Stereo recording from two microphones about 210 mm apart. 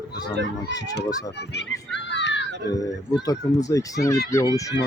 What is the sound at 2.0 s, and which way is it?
Children playing, 60° left (ahead or behind).